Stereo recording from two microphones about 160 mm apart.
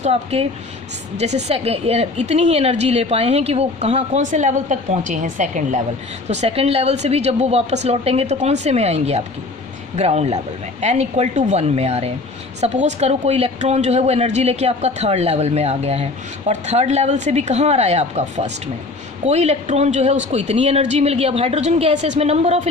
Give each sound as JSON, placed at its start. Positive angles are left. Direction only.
{"t": 0.0, "sound": "speech", "side_deg": -40}